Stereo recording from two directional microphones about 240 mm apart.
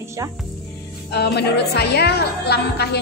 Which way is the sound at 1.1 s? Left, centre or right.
Left.